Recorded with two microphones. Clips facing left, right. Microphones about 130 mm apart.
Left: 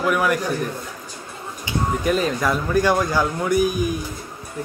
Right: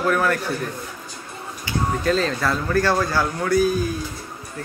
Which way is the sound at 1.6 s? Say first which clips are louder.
Even; 15° left (ahead or behind).